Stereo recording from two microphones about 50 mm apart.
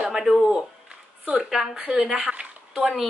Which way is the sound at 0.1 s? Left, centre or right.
Centre.